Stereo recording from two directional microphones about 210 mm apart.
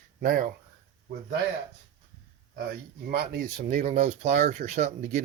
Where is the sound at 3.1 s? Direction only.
45° right (ahead or behind).